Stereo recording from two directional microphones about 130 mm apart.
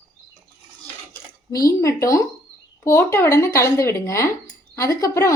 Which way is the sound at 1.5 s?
25° left (ahead or behind).